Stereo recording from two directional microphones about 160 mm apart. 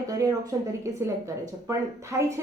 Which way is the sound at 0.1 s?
20° right (ahead or behind).